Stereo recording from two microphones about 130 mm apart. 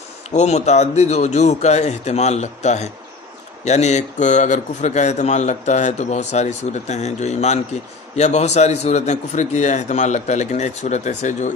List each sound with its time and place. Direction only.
0.3 s a man's voice: 60° left (ahead or behind)